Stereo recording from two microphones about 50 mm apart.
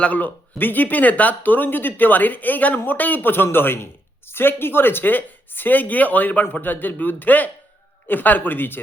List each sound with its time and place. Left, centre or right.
0.0 s speech: left